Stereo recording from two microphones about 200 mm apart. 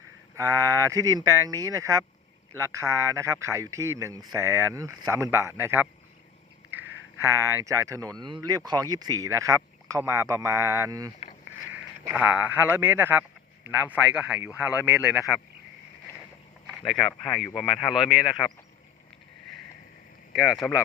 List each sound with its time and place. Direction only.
0.3 s speech: 15° right (ahead or behind)
6.7 s a sound: 10° right (ahead or behind)
7.2 s speech: 15° right (ahead or behind)
12.1 s speech: 5° right (ahead or behind)
16.8 s speech: centre (ahead or behind)
20.3 s speech: centre (ahead or behind)